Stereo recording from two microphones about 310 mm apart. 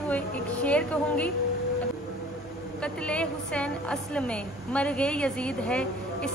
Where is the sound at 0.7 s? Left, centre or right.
Centre.